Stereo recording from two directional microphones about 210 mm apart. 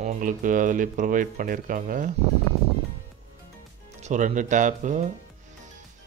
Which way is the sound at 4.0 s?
35° right (ahead or behind).